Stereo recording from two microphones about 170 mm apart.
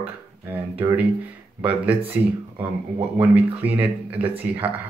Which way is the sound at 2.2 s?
10° right (ahead or behind).